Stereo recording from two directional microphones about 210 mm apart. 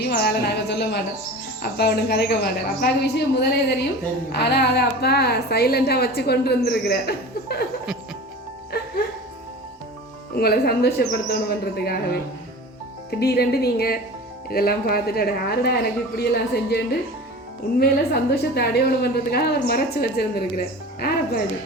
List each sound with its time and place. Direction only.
0.0 s a woman's voice: 50° left (ahead or behind)
8.7 s music: 50° left (ahead or behind)
10.3 s a woman's voice: 50° left (ahead or behind)
13.1 s a woman's voice: 50° left (ahead or behind)